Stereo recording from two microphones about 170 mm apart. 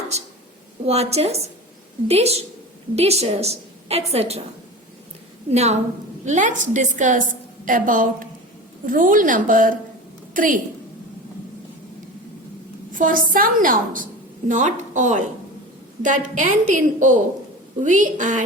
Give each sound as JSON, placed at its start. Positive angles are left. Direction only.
{"t": 0.9, "sound": "a woman's voice", "side_deg": -40}
{"t": 5.5, "sound": "a woman's voice", "side_deg": -40}
{"t": 12.9, "sound": "a woman's voice", "side_deg": -55}